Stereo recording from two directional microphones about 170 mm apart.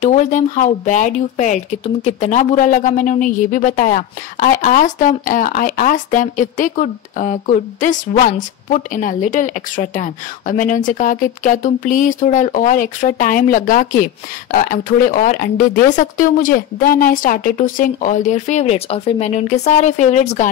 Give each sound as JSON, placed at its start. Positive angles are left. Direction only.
{"t": 0.0, "sound": "speech", "side_deg": 45}